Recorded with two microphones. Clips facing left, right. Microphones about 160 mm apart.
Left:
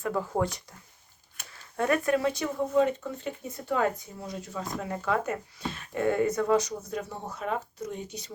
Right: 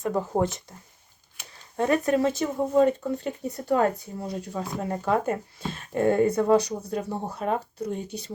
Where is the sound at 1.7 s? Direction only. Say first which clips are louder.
Right 3 dB; 25° right (ahead or behind).